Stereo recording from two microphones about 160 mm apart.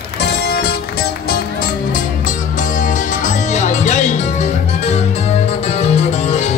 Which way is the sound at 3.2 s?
45° left (ahead or behind).